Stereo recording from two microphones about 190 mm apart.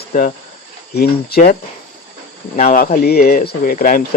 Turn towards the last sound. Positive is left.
turn(degrees=50)  # may be behind; listen again after turning